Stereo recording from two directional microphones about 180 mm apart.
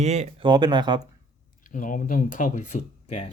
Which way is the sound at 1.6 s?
45° left (ahead or behind).